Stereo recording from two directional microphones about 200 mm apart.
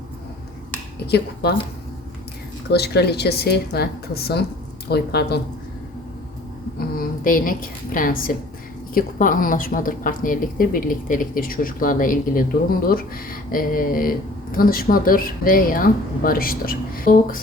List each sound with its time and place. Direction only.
1.0 s a woman's voice: 55° left (ahead or behind)
2.6 s a woman's voice: 55° left (ahead or behind)
7.3 s a woman's voice: 45° left (ahead or behind)